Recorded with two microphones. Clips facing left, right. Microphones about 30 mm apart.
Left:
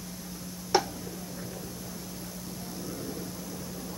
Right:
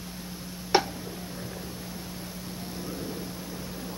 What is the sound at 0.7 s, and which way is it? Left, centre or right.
Tick-tock, right.